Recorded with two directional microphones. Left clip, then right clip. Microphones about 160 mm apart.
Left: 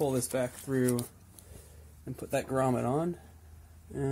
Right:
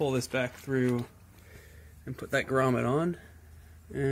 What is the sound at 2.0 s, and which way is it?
Speech, 15° right (ahead or behind).